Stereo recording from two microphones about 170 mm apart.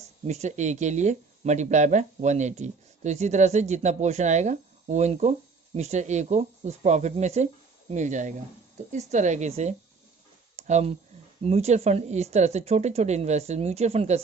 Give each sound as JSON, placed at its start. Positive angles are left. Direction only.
{"t": 0.3, "sound": "speech", "side_deg": -40}